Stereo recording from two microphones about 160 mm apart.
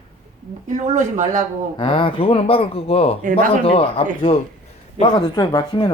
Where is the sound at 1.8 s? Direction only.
30° left (ahead or behind).